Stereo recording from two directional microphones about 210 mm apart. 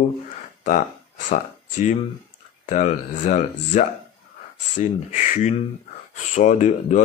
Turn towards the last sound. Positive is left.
turn(degrees=35)  # may be behind; listen again after turning